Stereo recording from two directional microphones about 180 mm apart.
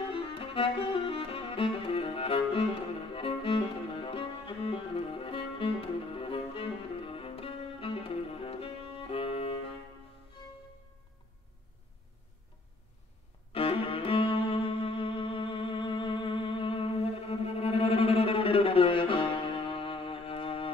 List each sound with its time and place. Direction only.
0.1 s music: 30° left (ahead or behind)
13.5 s music: 30° left (ahead or behind)